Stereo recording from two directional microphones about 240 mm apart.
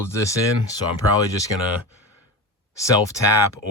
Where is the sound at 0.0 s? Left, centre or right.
Centre.